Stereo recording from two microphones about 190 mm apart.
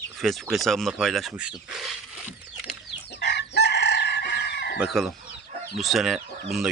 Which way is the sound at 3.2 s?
65° left (ahead or behind).